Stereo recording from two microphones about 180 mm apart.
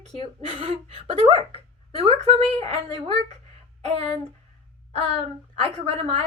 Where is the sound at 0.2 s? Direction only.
30° right (ahead or behind).